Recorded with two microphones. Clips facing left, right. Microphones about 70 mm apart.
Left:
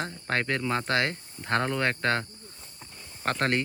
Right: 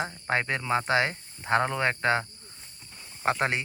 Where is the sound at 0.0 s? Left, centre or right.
Centre.